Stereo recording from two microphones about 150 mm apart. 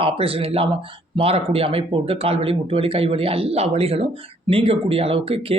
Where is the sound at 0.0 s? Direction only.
40° right (ahead or behind).